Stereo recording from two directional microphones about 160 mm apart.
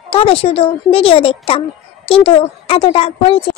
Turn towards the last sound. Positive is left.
turn(degrees=35)  # may be behind; listen again after turning